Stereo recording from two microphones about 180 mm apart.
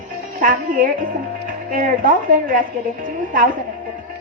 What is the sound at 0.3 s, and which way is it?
Speech, 45° right (ahead or behind).